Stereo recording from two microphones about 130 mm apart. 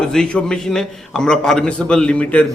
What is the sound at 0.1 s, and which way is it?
Speech, 5° left (ahead or behind).